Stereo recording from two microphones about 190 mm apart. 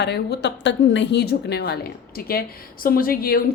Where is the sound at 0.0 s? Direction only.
60° left (ahead or behind).